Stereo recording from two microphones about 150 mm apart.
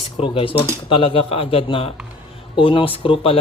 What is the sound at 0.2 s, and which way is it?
A man's voice, 35° left (ahead or behind).